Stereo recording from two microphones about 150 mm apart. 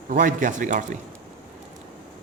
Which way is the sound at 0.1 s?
65° right (ahead or behind).